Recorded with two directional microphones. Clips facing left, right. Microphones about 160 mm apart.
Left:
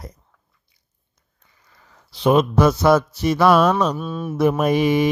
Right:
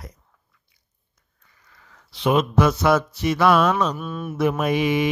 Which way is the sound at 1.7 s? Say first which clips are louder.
Left 1 dB; 25° left (ahead or behind).